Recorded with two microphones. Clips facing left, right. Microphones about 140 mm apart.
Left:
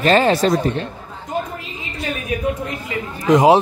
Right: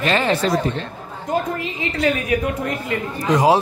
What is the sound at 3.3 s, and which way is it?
Speech, 20° left (ahead or behind).